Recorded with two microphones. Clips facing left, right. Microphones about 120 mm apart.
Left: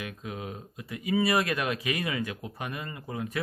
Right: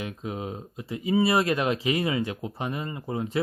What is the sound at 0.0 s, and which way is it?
Speech, 25° right (ahead or behind).